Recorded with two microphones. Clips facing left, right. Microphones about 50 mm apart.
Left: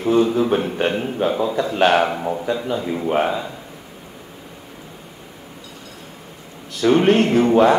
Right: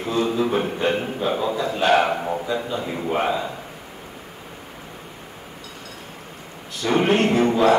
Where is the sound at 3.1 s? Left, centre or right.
Left.